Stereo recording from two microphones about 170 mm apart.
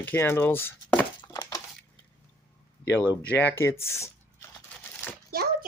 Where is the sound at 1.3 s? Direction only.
20° left (ahead or behind).